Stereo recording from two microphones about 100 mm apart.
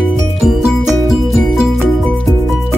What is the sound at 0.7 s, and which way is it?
Music, centre (ahead or behind).